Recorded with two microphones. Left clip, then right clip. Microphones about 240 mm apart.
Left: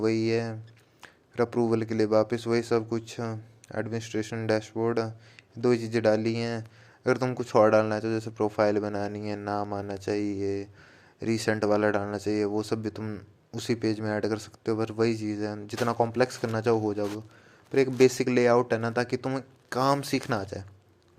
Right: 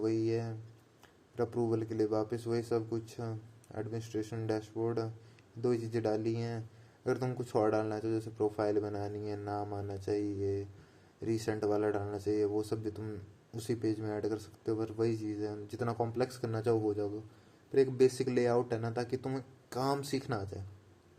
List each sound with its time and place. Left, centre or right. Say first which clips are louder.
0.0 s speech: left 7 dB; left
1.0 s a sound: left 8 dB; left
1.7 s speech: left 8 dB; left